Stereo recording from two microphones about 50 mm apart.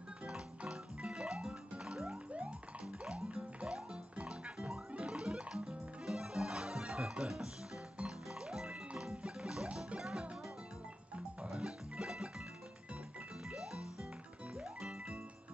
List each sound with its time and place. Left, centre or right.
0.6 s music: right
2.0 s music: right
11.5 s music: centre
13.6 s music: centre